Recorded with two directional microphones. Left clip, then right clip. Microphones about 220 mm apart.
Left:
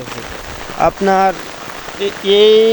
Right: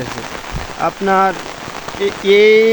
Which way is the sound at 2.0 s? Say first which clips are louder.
Even; 15° right (ahead or behind).